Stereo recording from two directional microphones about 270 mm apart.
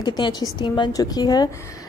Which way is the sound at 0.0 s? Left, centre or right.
Centre.